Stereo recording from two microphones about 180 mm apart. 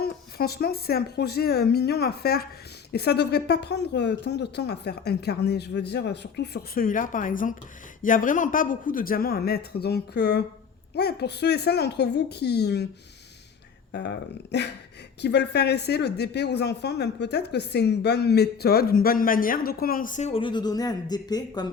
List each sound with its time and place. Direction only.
0.0 s a woman's voice: 60° left (ahead or behind)
13.9 s a woman's voice: 70° left (ahead or behind); by 21.7 s 20° left (ahead or behind)